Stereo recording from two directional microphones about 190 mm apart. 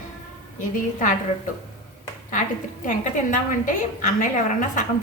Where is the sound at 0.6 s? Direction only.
45° left (ahead or behind).